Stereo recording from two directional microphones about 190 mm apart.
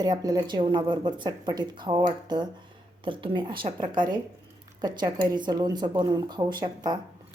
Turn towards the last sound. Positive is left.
turn(degrees=-20)  # may be behind; listen again after turning